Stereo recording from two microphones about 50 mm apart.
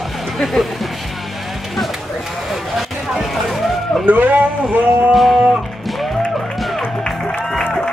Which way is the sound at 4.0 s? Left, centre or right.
Right.